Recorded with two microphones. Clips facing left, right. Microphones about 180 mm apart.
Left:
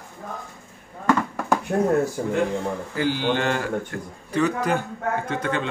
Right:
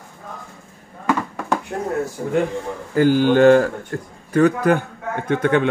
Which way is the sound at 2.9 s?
50° right (ahead or behind).